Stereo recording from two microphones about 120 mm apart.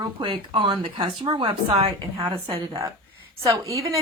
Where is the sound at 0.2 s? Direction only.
45° right (ahead or behind).